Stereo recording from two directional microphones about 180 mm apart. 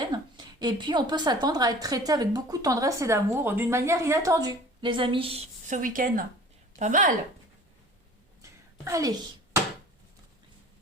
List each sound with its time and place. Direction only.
0.0 s a woman's voice: 25° right (ahead or behind)
5.6 s speech: 45° right (ahead or behind)
8.4 s a sound: 15° right (ahead or behind)